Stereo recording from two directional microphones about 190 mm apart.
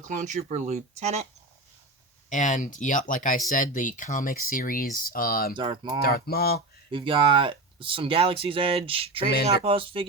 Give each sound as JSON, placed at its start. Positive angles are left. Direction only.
{"t": 0.0, "sound": "speech", "side_deg": -40}
{"t": 2.3, "sound": "speech", "side_deg": 40}
{"t": 5.5, "sound": "speech", "side_deg": -25}
{"t": 6.0, "sound": "speech", "side_deg": 55}
{"t": 6.9, "sound": "speech", "side_deg": -25}
{"t": 9.3, "sound": "speech", "side_deg": 60}
{"t": 9.6, "sound": "speech", "side_deg": -30}